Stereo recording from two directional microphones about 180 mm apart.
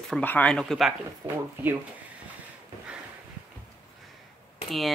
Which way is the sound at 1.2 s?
10° right (ahead or behind).